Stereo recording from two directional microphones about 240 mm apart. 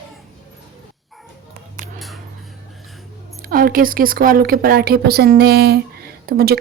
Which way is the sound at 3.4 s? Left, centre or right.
Right.